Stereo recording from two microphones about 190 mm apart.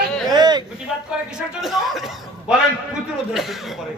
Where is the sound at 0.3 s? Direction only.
20° right (ahead or behind).